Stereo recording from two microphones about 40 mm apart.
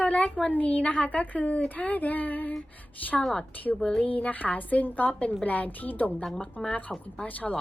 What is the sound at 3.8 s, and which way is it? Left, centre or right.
Speech, centre.